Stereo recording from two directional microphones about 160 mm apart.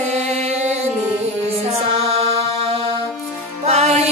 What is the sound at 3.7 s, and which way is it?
Music, 45° right (ahead or behind).